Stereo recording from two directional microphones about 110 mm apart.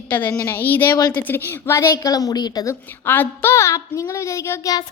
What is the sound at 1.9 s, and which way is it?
Speech, 35° left (ahead or behind).